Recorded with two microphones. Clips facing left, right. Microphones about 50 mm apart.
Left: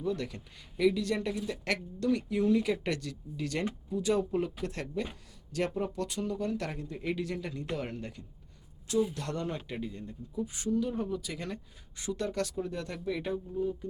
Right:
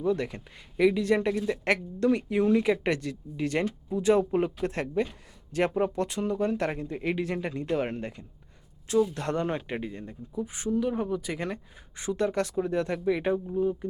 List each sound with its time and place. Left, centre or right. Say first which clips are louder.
0.0 s speech: right 6 dB; right
10.3 s speech: right 2 dB; right